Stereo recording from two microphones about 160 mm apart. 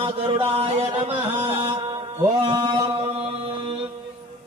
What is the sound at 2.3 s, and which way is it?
Chant, 30° right (ahead or behind).